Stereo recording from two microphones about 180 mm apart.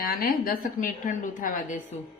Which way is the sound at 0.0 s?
50° left (ahead or behind).